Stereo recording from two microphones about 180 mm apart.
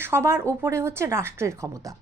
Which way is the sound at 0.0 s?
15° right (ahead or behind).